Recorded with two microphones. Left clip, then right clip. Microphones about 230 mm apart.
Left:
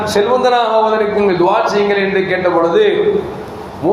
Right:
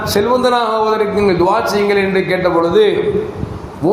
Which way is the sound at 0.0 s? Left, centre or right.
Right.